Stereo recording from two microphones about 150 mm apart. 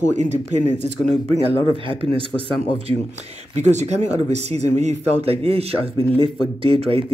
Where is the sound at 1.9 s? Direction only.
35° right (ahead or behind).